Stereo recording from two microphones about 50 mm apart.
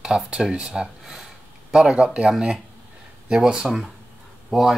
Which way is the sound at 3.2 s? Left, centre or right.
Centre.